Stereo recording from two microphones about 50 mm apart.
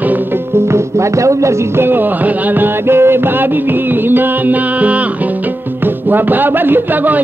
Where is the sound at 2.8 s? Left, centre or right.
Right.